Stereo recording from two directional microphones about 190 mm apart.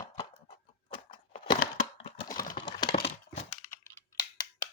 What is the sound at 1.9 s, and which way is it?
Computer keyboard, 25° left (ahead or behind).